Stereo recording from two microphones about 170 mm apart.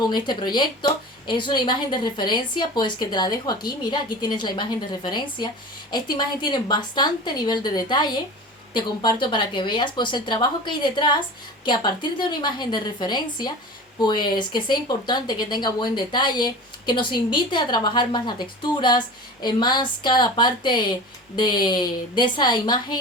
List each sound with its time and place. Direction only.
0.0 s speech: 25° left (ahead or behind)